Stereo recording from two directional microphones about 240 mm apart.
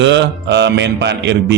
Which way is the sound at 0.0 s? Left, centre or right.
Right.